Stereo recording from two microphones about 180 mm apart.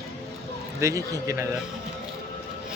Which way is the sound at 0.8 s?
15° right (ahead or behind).